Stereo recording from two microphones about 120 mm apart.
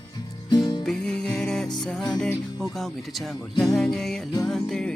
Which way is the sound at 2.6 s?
5° left (ahead or behind).